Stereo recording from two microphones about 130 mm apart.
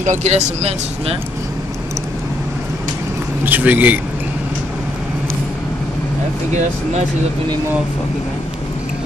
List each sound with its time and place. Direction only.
0.0 s speech: 65° right (ahead or behind)
3.4 s a man's voice: 15° right (ahead or behind)